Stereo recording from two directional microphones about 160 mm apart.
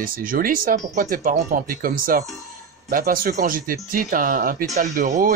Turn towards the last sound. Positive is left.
turn(degrees=-60)  # may be behind; listen again after turning